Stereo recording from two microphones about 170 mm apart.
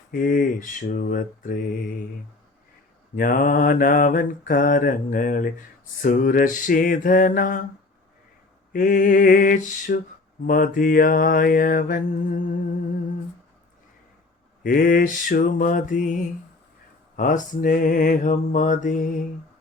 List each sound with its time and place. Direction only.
0.1 s mantra: 55° left (ahead or behind)
3.2 s mantra: 55° left (ahead or behind)
8.7 s mantra: 55° left (ahead or behind)
14.6 s mantra: 55° left (ahead or behind)